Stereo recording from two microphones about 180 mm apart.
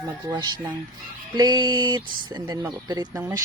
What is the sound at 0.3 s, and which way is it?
Speech, 25° right (ahead or behind).